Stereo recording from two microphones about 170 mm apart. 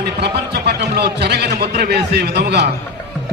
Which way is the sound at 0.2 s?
75° right (ahead or behind).